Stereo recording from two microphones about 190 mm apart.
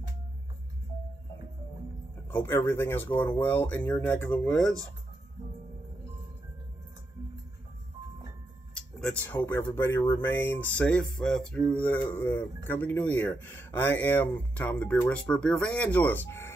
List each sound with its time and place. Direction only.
2.2 s speech: 10° left (ahead or behind)
8.7 s speech: 5° left (ahead or behind)